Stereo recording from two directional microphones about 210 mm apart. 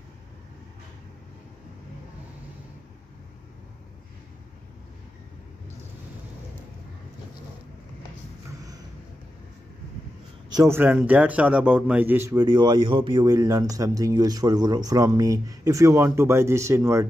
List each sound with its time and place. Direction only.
10.5 s a man's voice: 15° right (ahead or behind)